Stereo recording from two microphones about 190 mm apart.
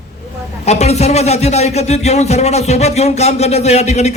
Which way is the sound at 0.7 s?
35° left (ahead or behind).